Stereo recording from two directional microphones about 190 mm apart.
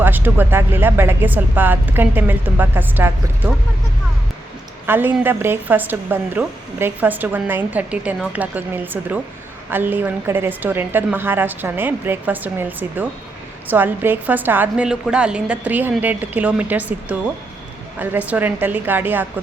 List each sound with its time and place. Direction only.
0.0 s a woman's voice: 10° right (ahead or behind)
4.9 s a woman's voice: 10° right (ahead or behind)